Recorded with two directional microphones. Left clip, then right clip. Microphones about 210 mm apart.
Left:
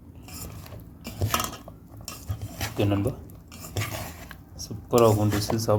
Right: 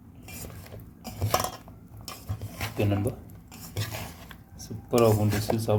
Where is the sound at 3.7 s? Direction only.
10° right (ahead or behind).